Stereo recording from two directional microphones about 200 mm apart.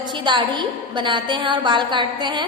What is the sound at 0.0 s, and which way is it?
A woman's voice, 20° right (ahead or behind).